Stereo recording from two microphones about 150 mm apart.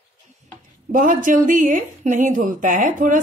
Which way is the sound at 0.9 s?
60° right (ahead or behind).